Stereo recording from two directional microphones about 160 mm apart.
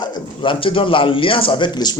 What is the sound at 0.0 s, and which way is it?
Speech, 30° left (ahead or behind).